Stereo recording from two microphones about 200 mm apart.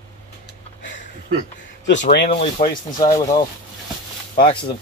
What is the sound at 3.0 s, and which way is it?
Speech, 15° left (ahead or behind).